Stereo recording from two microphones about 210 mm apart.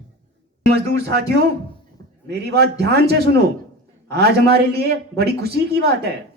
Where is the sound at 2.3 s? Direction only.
50° right (ahead or behind).